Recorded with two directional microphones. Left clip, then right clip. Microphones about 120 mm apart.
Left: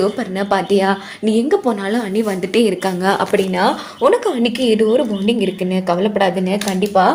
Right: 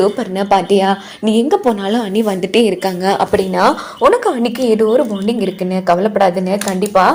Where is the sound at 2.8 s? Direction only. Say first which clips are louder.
Right 2 dB; 5° right (ahead or behind).